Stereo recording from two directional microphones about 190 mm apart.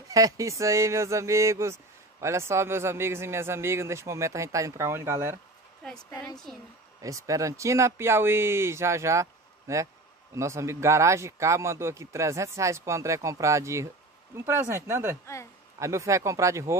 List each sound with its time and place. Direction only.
0.1 s speech: 15° right (ahead or behind)
5.8 s a woman's voice: centre (ahead or behind)
7.0 s speech: 15° right (ahead or behind)